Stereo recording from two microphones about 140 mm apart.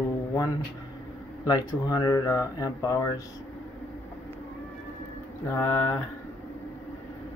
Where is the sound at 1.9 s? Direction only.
30° left (ahead or behind).